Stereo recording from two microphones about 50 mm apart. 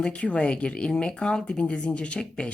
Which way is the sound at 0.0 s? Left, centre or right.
Centre.